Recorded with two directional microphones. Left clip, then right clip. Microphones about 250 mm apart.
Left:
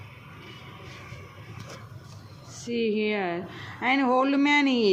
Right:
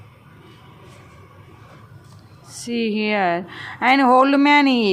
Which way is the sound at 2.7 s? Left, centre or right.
Centre.